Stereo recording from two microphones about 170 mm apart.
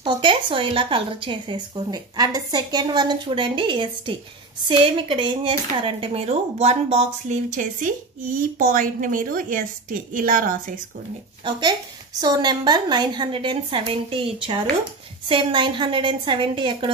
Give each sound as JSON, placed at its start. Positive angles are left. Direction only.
{"t": 0.0, "sound": "a woman's voice", "side_deg": -30}
{"t": 12.2, "sound": "speech", "side_deg": -25}